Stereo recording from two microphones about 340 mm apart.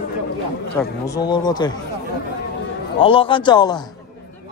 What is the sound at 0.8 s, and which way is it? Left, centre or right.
Speech, centre.